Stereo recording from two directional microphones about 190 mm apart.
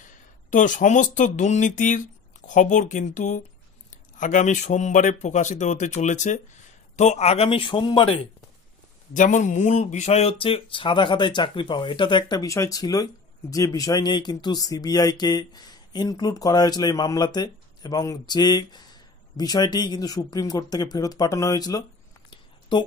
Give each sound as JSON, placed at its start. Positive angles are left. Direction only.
{"t": 0.0, "sound": "speech", "side_deg": 40}
{"t": 9.1, "sound": "speech", "side_deg": 40}
{"t": 22.3, "sound": "a sound", "side_deg": 25}